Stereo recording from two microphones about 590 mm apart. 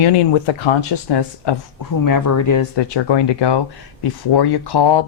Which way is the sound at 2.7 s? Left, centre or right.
Left.